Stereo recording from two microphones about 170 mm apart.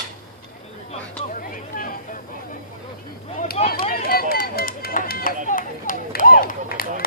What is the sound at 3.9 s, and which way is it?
Run, 60° left (ahead or behind).